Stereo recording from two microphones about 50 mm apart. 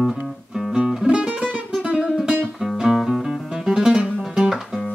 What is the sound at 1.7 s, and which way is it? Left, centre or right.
Music, centre.